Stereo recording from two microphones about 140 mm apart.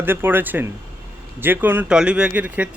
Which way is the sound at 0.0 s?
15° right (ahead or behind).